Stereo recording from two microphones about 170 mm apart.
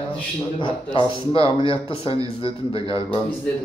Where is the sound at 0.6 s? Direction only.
30° left (ahead or behind).